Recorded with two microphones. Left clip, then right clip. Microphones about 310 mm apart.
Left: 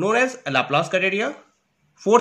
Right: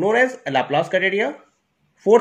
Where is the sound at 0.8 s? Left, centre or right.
Centre.